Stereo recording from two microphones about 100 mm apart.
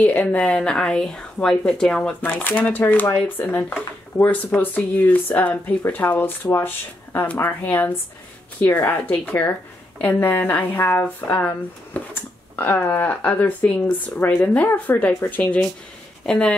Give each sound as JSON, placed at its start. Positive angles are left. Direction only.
{"t": 0.0, "sound": "a woman's voice", "side_deg": 15}